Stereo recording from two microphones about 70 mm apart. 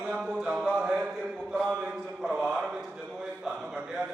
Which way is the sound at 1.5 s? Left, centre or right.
Centre.